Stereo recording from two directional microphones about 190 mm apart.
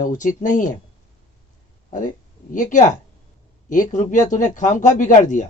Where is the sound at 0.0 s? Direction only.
40° left (ahead or behind).